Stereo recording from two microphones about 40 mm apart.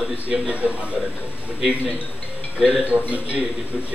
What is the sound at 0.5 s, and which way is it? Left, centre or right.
Speech, right.